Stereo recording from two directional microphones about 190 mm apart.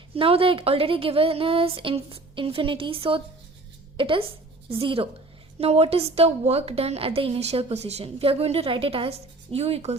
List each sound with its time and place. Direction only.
0.1 s a woman's voice: 30° right (ahead or behind)